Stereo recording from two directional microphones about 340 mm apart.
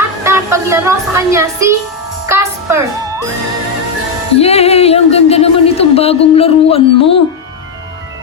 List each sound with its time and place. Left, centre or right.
0.3 s a woman's voice: centre
2.3 s music: centre
4.4 s music: centre